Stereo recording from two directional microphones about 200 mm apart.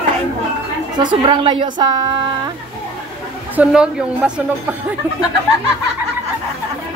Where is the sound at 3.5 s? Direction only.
5° right (ahead or behind).